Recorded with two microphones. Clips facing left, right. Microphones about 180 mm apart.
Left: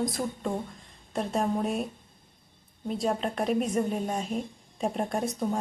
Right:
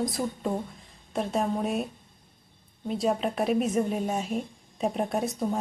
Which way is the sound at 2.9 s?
Centre (ahead or behind).